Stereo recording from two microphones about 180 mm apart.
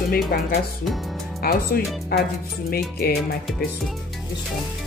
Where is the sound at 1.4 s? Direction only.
55° left (ahead or behind).